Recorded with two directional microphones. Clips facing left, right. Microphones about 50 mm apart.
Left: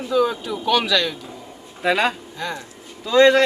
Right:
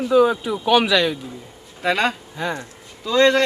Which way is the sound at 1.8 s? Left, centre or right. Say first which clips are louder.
Left 1 dB; centre.